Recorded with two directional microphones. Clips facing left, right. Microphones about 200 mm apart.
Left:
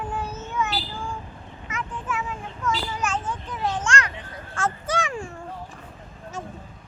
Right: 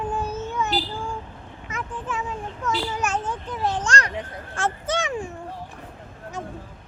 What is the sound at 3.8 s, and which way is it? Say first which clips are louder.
Speech: right 1 dB; 35° right (ahead or behind).